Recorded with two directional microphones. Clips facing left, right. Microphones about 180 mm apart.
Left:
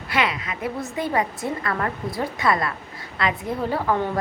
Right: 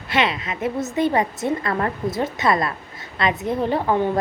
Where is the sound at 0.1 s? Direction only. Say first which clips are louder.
Right 3 dB; 25° right (ahead or behind).